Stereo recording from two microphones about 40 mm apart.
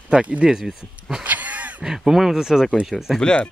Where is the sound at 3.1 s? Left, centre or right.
Left.